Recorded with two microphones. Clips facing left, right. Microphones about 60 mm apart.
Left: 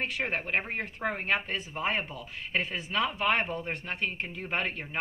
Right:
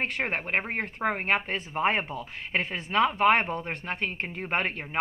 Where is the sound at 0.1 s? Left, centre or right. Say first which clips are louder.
Right 2 dB; right.